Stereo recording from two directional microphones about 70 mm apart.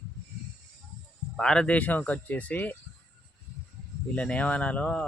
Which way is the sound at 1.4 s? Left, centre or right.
Centre.